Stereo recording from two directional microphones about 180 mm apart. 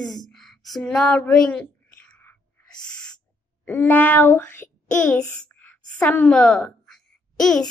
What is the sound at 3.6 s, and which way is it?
A child's voice, 10° left (ahead or behind).